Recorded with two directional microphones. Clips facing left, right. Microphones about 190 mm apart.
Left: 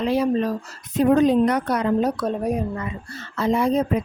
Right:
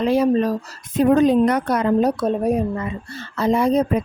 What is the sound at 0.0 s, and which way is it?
A woman's voice, 45° right (ahead or behind).